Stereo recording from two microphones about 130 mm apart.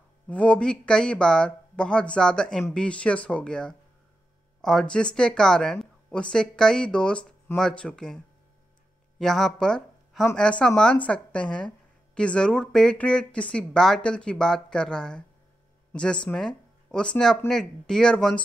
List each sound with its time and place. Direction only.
0.3 s speech: 10° left (ahead or behind)
9.2 s speech: 5° left (ahead or behind)